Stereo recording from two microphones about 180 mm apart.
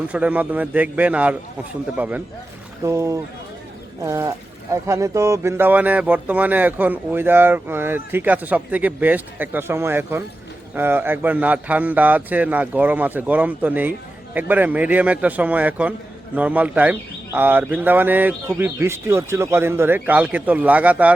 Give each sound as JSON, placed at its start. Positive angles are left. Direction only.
{"t": 0.1, "sound": "a man's voice", "side_deg": -10}